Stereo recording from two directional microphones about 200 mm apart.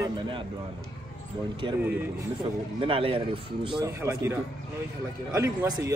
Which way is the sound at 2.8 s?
30° right (ahead or behind).